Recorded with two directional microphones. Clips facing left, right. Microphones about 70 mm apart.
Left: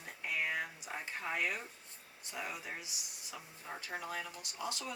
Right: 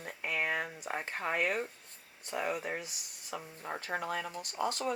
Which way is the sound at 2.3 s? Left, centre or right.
Right.